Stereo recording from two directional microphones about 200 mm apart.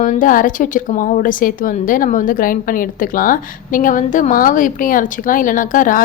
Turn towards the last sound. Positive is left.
turn(degrees=40)  # may be behind; listen again after turning